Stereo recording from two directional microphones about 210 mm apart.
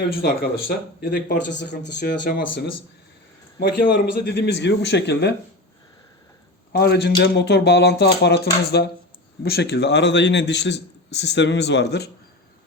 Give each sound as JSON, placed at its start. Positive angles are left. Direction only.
{"t": 1.0, "sound": "a man's voice", "side_deg": 50}
{"t": 2.2, "sound": "speech", "side_deg": 45}
{"t": 6.7, "sound": "a man's voice", "side_deg": 50}